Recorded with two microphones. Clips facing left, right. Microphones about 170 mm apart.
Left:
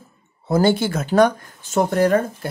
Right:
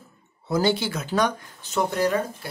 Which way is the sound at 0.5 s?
50° left (ahead or behind).